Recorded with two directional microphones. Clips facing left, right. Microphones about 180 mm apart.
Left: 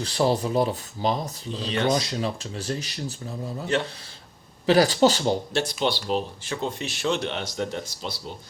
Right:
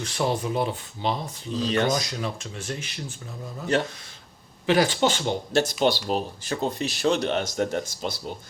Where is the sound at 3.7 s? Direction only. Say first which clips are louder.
Right 2 dB; 40° right (ahead or behind).